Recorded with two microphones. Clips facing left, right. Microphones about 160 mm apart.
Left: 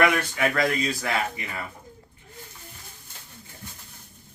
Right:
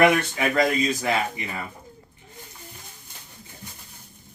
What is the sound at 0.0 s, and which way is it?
Speech, 20° right (ahead or behind).